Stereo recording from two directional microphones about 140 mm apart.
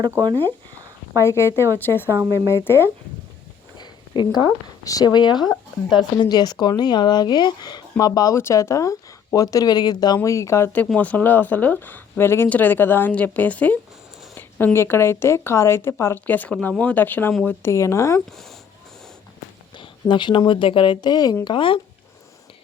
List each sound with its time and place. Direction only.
0.1 s speech: 25° right (ahead or behind)
1.2 s speech: 20° left (ahead or behind)
2.0 s speech: 15° right (ahead or behind)
2.6 s a woman's voice: 15° left (ahead or behind)
3.8 s a sound: 35° left (ahead or behind)
4.8 s a woman's voice: 25° left (ahead or behind)
18.3 s speech: centre (ahead or behind)
19.7 s speech: 35° left (ahead or behind)